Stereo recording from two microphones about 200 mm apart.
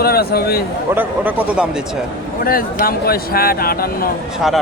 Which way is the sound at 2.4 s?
45° left (ahead or behind).